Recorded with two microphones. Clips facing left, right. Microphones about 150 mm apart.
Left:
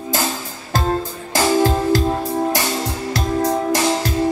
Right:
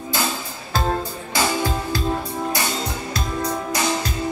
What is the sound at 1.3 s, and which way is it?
Music, 45° left (ahead or behind).